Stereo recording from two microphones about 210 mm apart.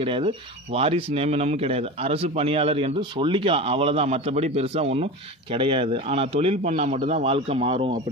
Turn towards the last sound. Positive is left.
turn(degrees=-25)  # may be behind; listen again after turning